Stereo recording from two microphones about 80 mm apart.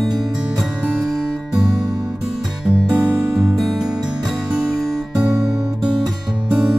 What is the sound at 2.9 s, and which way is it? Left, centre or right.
Music, right.